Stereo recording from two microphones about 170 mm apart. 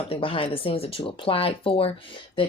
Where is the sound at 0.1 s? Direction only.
30° left (ahead or behind).